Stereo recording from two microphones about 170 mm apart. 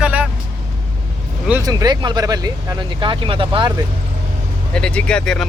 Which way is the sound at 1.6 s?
25° right (ahead or behind).